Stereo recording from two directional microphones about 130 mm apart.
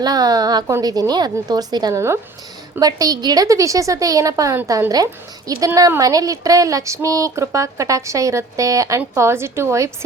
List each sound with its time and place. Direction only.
0.0 s a woman's voice: 30° right (ahead or behind)